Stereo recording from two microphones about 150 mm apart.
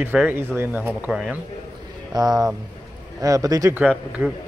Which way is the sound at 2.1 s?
25° right (ahead or behind).